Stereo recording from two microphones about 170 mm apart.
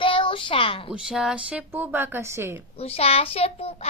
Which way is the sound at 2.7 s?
35° left (ahead or behind).